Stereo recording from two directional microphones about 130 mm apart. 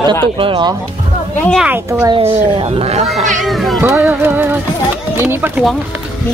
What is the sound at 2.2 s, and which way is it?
Speech, 50° right (ahead or behind).